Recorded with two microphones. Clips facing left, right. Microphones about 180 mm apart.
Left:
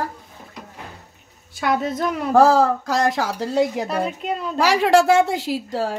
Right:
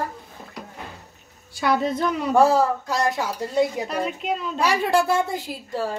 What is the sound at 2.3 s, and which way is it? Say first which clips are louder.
A woman's voice: left 3 dB; 90° left.